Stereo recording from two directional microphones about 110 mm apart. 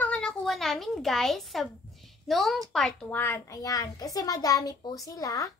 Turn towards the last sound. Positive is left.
turn(degrees=30)  # may be behind; listen again after turning